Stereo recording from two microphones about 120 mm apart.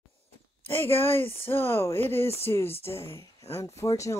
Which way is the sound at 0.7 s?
20° left (ahead or behind).